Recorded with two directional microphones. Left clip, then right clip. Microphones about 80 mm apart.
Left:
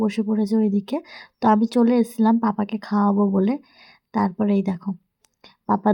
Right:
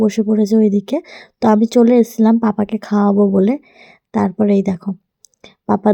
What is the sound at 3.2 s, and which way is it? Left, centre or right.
Speech, right.